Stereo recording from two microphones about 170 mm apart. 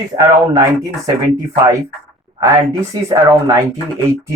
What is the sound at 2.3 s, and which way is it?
Speech, 20° right (ahead or behind).